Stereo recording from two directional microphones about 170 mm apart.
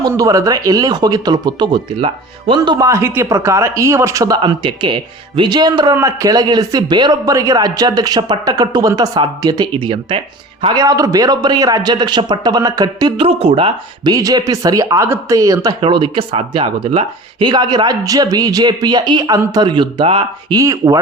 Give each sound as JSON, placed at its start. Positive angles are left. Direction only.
{"t": 0.0, "sound": "a man's voice", "side_deg": -20}